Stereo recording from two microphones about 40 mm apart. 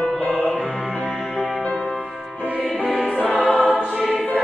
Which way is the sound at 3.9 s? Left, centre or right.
Centre.